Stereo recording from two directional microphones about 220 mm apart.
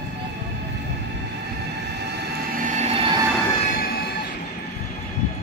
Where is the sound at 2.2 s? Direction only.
35° right (ahead or behind).